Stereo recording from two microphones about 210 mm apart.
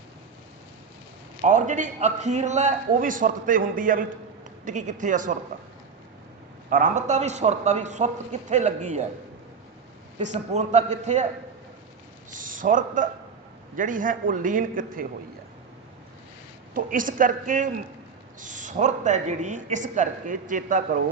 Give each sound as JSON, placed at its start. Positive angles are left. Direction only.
{"t": 1.5, "sound": "a woman's voice", "side_deg": -35}
{"t": 6.7, "sound": "a woman's voice", "side_deg": -40}
{"t": 10.2, "sound": "a woman's voice", "side_deg": -35}
{"t": 12.3, "sound": "a woman's voice", "side_deg": -40}
{"t": 16.7, "sound": "a woman's voice", "side_deg": -40}